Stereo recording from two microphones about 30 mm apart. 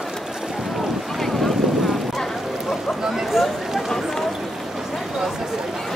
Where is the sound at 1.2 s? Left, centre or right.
Centre.